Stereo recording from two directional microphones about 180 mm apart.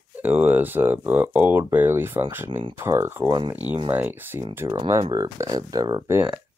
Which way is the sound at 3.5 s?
10° right (ahead or behind).